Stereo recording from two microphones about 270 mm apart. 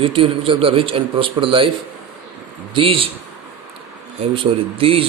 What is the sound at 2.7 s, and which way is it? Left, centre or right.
Speech, centre.